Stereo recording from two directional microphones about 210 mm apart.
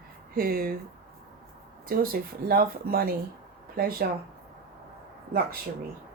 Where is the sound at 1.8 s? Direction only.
45° right (ahead or behind).